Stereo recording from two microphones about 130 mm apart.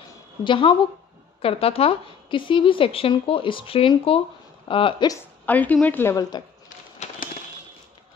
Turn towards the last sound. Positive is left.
turn(degrees=60)  # may be behind; listen again after turning